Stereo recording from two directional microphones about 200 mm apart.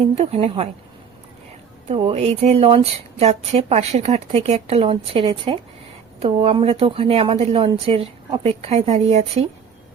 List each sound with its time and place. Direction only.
0.2 s speech: 30° right (ahead or behind)
1.9 s speech: 30° right (ahead or behind)